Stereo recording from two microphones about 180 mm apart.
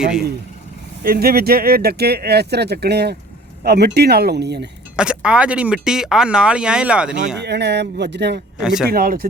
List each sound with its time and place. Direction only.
0.0 s speech: 5° right (ahead or behind)
1.0 s speech: 55° right (ahead or behind)
4.9 s speech: 5° right (ahead or behind)
7.3 s speech: 70° right (ahead or behind)
8.6 s speech: 5° right (ahead or behind)
8.9 s speech: 55° right (ahead or behind)